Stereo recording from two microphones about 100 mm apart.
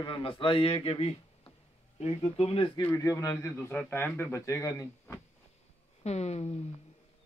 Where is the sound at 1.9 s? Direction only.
90° left; by 2.7 s 70° left (ahead or behind).